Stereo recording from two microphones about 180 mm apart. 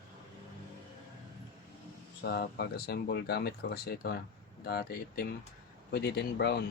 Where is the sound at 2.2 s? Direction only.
65° left (ahead or behind).